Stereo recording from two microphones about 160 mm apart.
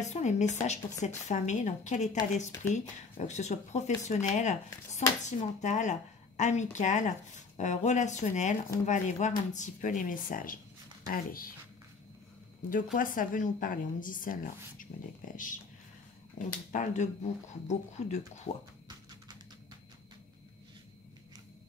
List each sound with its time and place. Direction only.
0.0 s a woman's voice: 45° left (ahead or behind); by 11.5 s 65° left (ahead or behind)
12.9 s a woman's voice: 55° left (ahead or behind)
16.7 s a woman's voice: 50° left (ahead or behind)